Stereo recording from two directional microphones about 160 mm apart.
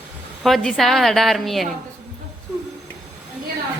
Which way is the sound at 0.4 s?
Centre (ahead or behind).